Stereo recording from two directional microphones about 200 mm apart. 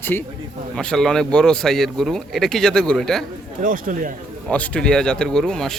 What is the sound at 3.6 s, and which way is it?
Speech, 40° right (ahead or behind).